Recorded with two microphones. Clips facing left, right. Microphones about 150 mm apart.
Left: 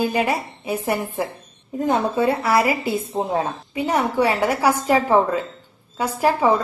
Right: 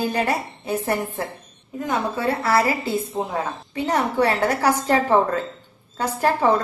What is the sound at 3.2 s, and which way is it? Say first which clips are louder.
Speech: left 2 dB; 25° left (ahead or behind).